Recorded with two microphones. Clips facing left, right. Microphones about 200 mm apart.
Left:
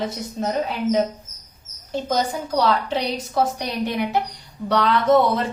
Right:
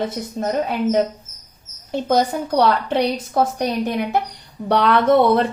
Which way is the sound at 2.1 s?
60° right (ahead or behind).